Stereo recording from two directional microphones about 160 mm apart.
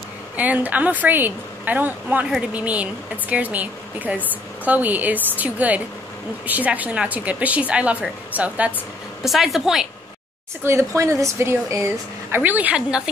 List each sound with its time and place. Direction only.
0.4 s a woman's voice: 10° right (ahead or behind)
10.6 s a woman's voice: 15° right (ahead or behind)